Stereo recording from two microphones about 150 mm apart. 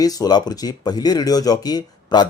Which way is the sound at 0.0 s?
25° left (ahead or behind).